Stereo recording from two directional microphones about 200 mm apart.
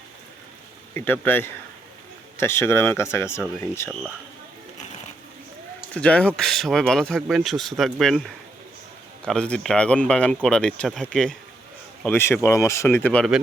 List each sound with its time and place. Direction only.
0.9 s speech: 10° left (ahead or behind)
5.9 s speech: 5° left (ahead or behind)